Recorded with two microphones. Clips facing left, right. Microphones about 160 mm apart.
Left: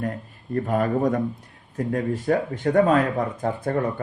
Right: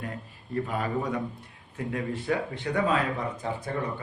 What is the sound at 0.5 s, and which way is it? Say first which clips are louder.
Speech: left 7 dB; 50° left (ahead or behind).